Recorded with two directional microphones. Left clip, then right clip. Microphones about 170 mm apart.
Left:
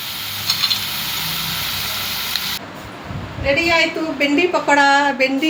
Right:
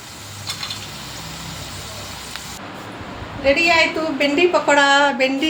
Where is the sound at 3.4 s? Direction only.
25° right (ahead or behind).